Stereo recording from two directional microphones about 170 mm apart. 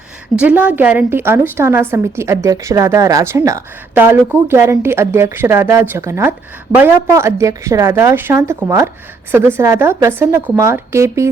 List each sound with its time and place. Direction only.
0.3 s a woman's voice: 10° right (ahead or behind)